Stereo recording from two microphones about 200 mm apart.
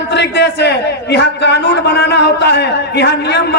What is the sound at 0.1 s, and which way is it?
A man's voice, 60° left (ahead or behind).